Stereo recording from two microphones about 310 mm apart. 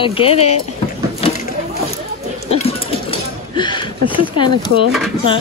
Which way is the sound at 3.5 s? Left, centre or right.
Centre.